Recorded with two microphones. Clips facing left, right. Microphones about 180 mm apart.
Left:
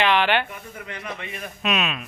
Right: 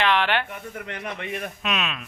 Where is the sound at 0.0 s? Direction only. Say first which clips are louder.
Left 2 dB; 5° left (ahead or behind).